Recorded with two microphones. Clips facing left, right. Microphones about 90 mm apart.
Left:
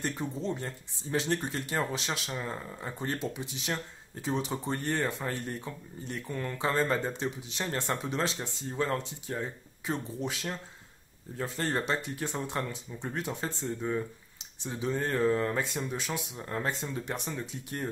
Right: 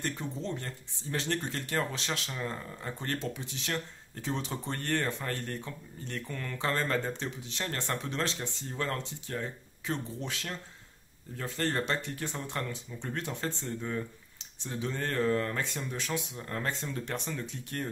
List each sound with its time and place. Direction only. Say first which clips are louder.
0.0 s speech: left 2 dB; 15° left (ahead or behind)